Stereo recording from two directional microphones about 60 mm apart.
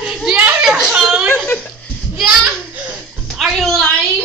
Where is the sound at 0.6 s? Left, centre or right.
Centre.